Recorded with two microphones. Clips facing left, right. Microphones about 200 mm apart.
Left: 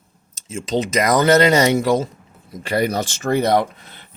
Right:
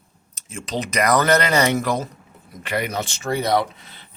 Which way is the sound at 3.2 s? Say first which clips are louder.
Left 4 dB; 55° left (ahead or behind).